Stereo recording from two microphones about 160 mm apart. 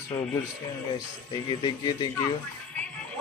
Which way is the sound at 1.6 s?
30° left (ahead or behind).